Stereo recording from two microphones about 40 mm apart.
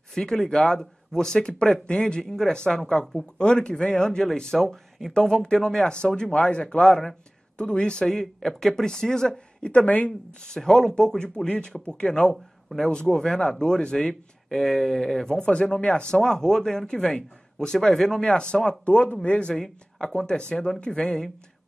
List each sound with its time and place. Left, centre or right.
0.1 s speech: centre
8.4 s speech: centre
9.6 s speech: left
9.8 s speech: left
10.4 s speech: centre
16.2 s speech: centre
18.2 s speech: left
19.5 s speech: centre
20.2 s speech: left